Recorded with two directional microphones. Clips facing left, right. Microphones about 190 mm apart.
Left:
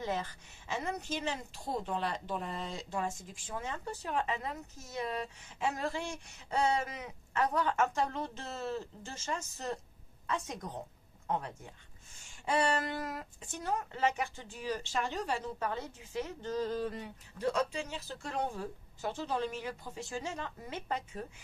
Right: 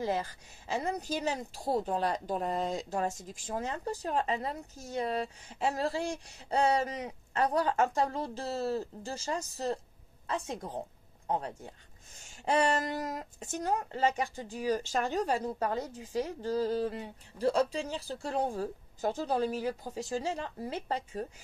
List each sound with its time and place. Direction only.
0.0 s speech: 35° right (ahead or behind)